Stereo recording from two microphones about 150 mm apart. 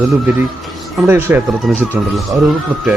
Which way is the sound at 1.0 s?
15° right (ahead or behind).